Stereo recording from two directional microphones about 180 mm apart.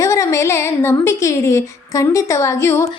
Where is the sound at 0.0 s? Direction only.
15° left (ahead or behind).